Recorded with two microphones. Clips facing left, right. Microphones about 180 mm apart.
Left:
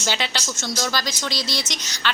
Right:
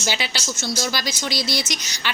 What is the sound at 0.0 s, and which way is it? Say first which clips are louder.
A woman's voice: even; 10° right (ahead or behind).